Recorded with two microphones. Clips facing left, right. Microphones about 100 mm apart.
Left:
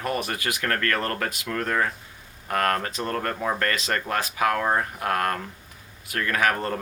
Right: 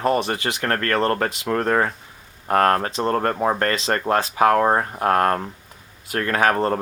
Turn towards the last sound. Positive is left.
turn(degrees=-30)  # may be behind; listen again after turning